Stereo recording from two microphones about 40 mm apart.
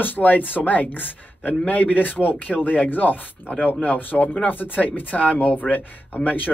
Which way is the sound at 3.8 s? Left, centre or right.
Left.